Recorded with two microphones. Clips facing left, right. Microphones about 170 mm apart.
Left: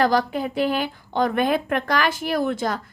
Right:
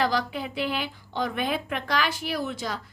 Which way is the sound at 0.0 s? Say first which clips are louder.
Left 6 dB; 45° left (ahead or behind).